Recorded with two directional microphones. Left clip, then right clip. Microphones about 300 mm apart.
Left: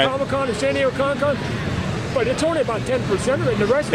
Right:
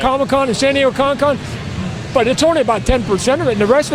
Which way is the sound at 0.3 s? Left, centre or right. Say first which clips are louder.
Right 7 dB; right.